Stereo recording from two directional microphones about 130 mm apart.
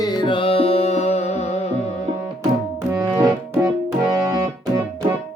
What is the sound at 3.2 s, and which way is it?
Music, 15° right (ahead or behind).